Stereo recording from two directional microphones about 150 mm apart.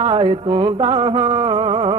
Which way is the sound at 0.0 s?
35° right (ahead or behind).